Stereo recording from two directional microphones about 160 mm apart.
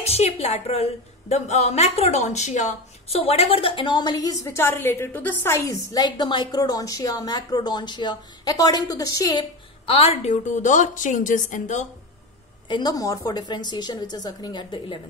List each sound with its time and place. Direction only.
0.0 s a woman's voice: 40° left (ahead or behind)
12.6 s speech: 30° left (ahead or behind)